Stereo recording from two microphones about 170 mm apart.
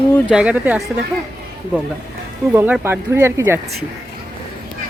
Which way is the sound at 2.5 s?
10° right (ahead or behind).